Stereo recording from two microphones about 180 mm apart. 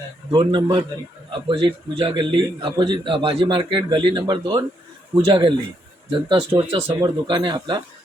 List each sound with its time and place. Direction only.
0.3 s a man's voice: 25° right (ahead or behind)